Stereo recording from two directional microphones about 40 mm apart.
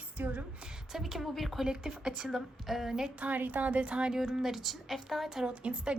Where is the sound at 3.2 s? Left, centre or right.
Right.